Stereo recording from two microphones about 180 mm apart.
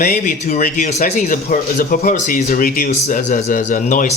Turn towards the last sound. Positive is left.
turn(degrees=45)  # may be behind; listen again after turning